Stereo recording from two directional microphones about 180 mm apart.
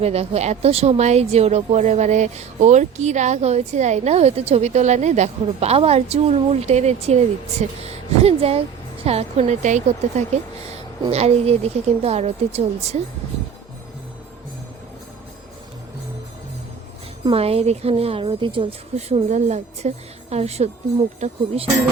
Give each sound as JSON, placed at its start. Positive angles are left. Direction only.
{"t": 0.0, "sound": "a woman's voice", "side_deg": -35}
{"t": 17.2, "sound": "a woman's voice", "side_deg": -35}